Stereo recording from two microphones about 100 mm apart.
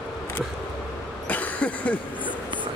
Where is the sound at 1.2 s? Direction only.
15° left (ahead or behind).